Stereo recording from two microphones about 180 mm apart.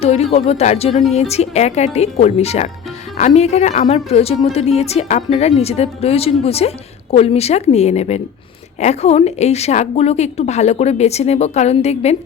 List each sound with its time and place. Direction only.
0.0 s speech: 35° left (ahead or behind)